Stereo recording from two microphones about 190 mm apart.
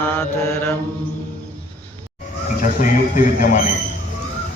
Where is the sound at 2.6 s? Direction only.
45° left (ahead or behind).